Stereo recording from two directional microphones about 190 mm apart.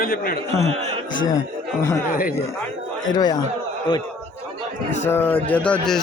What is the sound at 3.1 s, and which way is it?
Speech, 20° left (ahead or behind).